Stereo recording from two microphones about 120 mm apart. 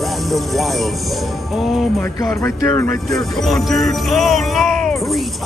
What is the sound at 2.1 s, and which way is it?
Speech, 25° left (ahead or behind).